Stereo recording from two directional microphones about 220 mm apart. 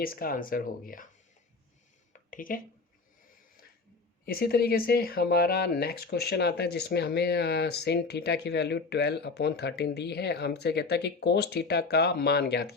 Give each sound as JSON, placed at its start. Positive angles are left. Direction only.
{"t": 0.0, "sound": "speech", "side_deg": 40}
{"t": 2.1, "sound": "a sound", "side_deg": 40}
{"t": 4.3, "sound": "speech", "side_deg": 45}